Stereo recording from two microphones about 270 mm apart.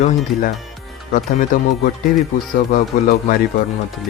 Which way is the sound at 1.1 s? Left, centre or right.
Left.